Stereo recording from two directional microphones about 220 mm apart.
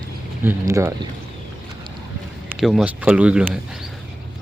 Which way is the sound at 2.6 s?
Centre (ahead or behind).